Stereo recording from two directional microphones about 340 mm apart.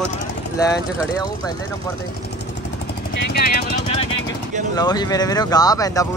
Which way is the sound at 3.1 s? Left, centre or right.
Left.